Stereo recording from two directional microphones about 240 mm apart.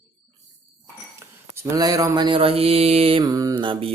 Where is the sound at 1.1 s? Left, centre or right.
Centre.